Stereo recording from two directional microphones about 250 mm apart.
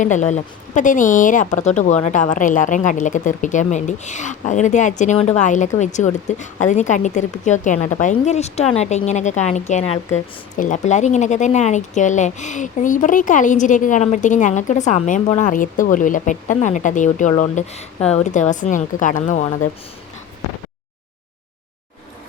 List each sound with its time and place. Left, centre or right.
0.0 s a woman's voice: left